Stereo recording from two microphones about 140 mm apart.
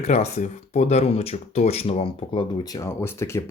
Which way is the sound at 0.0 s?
50° left (ahead or behind).